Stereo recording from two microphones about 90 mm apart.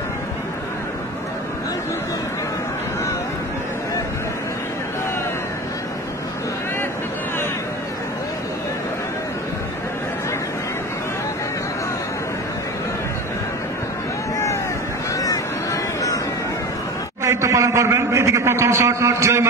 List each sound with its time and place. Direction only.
15.1 s vehicle: 40° left (ahead or behind)
17.2 s a man's voice: 35° right (ahead or behind)